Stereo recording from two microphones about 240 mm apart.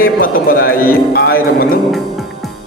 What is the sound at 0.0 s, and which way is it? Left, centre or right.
Speech, left.